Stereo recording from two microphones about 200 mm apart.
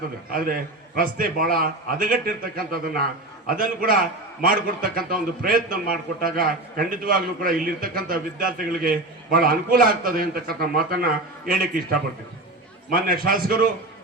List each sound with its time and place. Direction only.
0.3 s a man's voice: 45° right (ahead or behind)
12.9 s a man's voice: 45° right (ahead or behind)